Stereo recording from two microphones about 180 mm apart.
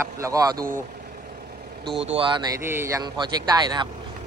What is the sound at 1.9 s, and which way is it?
Speech, 5° right (ahead or behind).